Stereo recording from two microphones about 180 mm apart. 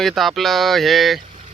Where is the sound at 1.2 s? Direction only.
45° right (ahead or behind).